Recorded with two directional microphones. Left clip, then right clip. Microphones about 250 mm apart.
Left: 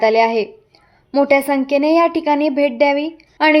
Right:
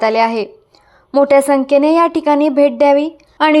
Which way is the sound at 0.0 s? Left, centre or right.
Centre.